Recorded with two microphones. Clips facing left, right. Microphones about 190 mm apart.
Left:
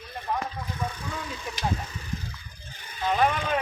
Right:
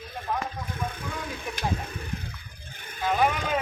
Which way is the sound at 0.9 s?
55° right (ahead or behind).